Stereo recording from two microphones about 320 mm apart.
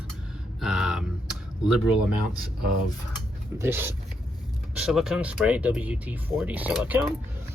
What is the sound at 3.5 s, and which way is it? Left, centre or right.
Speech, centre.